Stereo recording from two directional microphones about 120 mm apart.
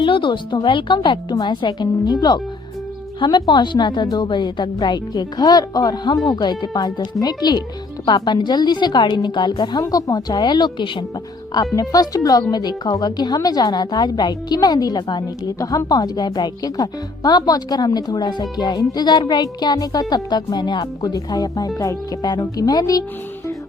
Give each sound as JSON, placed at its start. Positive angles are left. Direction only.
{"t": 0.0, "sound": "speech", "side_deg": 45}
{"t": 3.2, "sound": "speech", "side_deg": 40}
{"t": 11.5, "sound": "speech", "side_deg": 30}